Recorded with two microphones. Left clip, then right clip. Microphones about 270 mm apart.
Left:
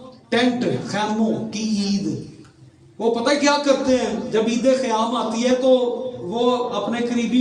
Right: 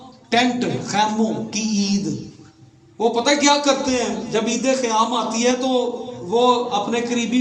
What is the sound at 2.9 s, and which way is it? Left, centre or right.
A man's voice, right.